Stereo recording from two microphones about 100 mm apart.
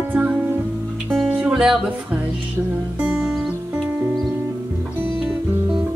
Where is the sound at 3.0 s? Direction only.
15° right (ahead or behind).